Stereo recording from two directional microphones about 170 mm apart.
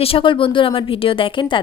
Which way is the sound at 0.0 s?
30° left (ahead or behind).